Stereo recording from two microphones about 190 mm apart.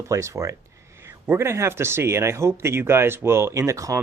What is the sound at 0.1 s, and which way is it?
Speech, 15° right (ahead or behind).